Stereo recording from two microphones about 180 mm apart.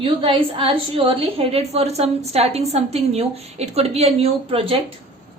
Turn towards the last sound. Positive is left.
turn(degrees=-30)  # may be behind; listen again after turning